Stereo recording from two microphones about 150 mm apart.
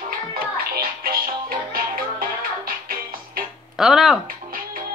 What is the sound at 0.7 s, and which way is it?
Music, 80° right.